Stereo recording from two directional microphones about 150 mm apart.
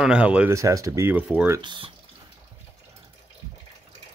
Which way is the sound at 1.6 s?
30° right (ahead or behind).